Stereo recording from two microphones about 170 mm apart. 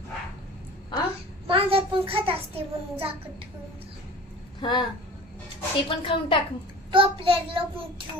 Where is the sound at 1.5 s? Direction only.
35° right (ahead or behind).